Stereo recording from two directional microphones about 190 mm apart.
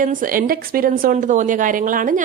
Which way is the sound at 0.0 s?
45° right (ahead or behind).